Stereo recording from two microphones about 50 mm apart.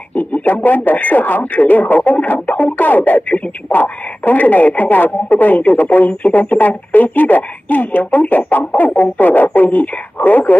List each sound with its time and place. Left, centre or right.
0.1 s speech: left